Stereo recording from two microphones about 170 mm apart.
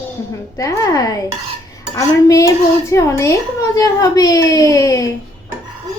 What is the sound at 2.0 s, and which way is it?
A woman's voice, 20° left (ahead or behind).